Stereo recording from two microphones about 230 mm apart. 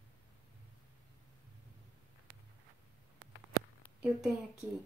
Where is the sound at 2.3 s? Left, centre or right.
Right.